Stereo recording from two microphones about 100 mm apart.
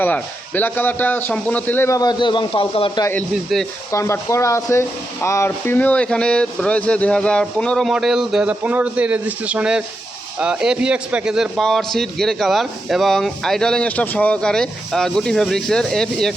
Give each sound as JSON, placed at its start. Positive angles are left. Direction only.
{"t": 0.0, "sound": "speech", "side_deg": 20}
{"t": 1.9, "sound": "a man's voice", "side_deg": 40}
{"t": 3.5, "sound": "a man's voice", "side_deg": 0}
{"t": 3.9, "sound": "a man's voice", "side_deg": 30}